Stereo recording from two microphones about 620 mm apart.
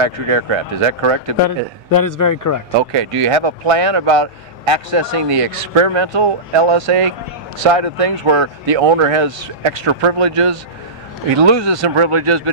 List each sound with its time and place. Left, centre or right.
0.0 s speech: right
1.9 s speech: left
2.8 s speech: right